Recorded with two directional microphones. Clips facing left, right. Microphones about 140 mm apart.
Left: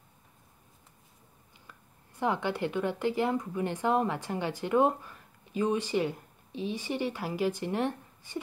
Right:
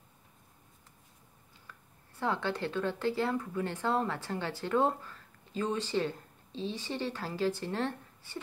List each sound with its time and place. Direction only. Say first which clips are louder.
1.7 s speech: even; 15° left (ahead or behind)